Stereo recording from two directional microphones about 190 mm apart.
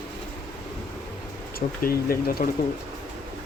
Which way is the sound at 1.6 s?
50° left (ahead or behind).